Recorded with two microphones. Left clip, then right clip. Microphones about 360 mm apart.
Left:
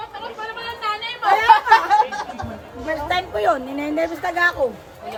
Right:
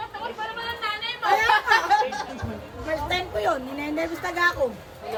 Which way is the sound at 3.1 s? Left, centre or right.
Left.